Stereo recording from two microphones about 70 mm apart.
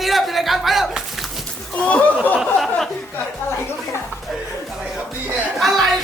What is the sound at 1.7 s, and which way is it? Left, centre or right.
Speech, centre.